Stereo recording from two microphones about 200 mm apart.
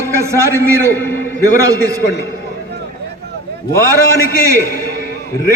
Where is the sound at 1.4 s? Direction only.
15° right (ahead or behind).